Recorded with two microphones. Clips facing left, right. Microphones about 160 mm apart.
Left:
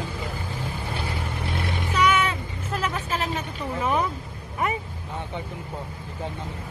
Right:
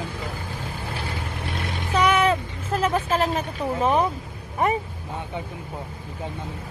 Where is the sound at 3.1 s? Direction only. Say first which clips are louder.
Right 5 dB; 30° right (ahead or behind).